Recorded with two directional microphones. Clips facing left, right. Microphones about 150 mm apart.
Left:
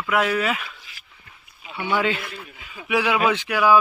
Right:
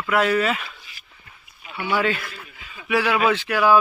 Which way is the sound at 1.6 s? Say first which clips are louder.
Even; 25° left (ahead or behind).